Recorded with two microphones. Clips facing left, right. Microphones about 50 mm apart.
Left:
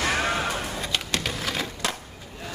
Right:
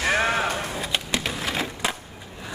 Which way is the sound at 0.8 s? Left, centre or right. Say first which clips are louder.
Right 1 dB; centre.